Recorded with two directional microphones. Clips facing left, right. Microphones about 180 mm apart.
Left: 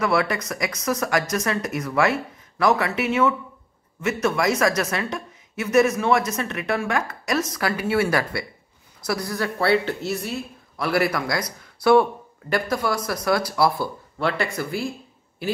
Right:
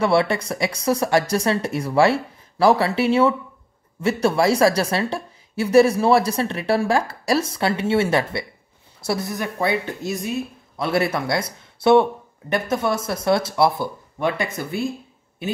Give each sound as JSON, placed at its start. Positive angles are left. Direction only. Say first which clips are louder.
{"t": 0.0, "sound": "a woman's voice", "louder": "right 3 dB", "side_deg": -30}